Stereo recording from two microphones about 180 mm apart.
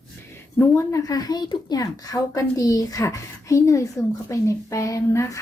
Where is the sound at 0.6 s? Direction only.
15° left (ahead or behind).